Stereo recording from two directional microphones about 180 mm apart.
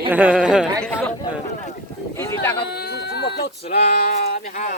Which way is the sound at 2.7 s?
60° left (ahead or behind).